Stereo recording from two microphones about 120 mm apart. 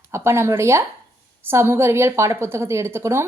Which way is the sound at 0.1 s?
20° right (ahead or behind).